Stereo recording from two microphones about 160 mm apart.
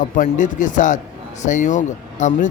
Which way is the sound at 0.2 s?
50° left (ahead or behind).